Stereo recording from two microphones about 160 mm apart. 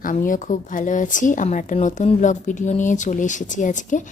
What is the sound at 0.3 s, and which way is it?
A woman's voice, 55° left (ahead or behind).